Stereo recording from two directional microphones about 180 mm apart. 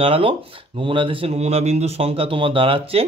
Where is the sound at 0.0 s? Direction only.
30° right (ahead or behind).